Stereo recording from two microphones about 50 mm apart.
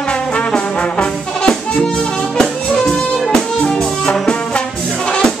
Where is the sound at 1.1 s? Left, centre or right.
Centre.